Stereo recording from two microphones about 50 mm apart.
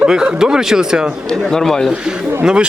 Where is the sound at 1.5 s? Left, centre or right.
Centre.